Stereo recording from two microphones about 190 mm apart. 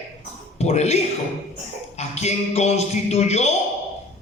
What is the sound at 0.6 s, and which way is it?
A man's voice, 35° left (ahead or behind).